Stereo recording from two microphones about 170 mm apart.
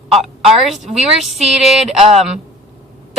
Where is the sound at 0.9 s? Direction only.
Centre (ahead or behind).